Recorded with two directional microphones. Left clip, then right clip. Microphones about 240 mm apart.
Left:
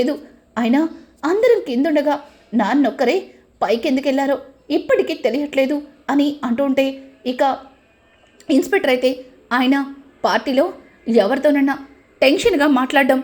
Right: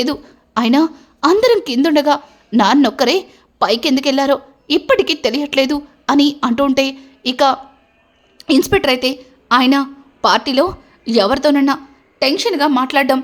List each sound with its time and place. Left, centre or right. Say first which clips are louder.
0.0 s a woman's voice: right 1 dB; centre
12.2 s a woman's voice: left 1 dB; centre